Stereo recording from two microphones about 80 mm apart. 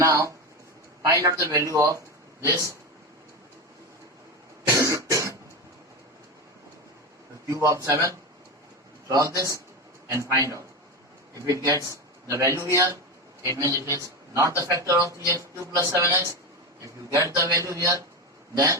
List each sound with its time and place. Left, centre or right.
0.0 s a man's voice: right
4.8 s cough: right
7.4 s a man's voice: right